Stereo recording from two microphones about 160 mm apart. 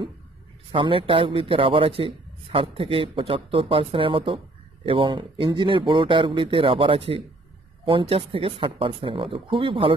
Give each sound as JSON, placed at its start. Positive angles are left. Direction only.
{"t": 0.7, "sound": "speech", "side_deg": -35}